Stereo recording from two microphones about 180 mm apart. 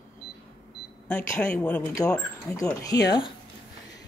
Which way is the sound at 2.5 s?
20° left (ahead or behind).